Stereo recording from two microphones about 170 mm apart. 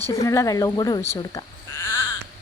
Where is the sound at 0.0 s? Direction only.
20° left (ahead or behind).